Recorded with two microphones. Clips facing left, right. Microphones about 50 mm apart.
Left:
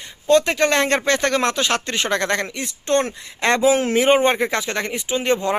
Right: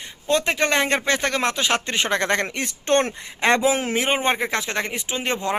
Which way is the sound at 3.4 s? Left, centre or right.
Centre.